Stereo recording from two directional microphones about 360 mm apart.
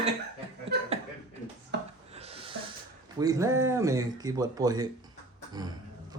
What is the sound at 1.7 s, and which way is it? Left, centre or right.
Wood, right.